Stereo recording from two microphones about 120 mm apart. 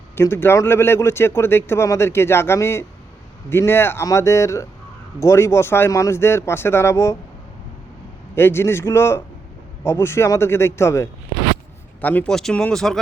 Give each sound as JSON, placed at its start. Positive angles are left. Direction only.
{"t": 0.2, "sound": "speech", "side_deg": 20}
{"t": 8.4, "sound": "speech", "side_deg": 20}
{"t": 11.9, "sound": "speech", "side_deg": 10}